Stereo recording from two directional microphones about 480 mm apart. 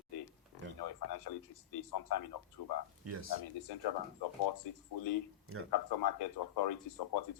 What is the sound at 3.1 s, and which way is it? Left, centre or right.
Speech, right.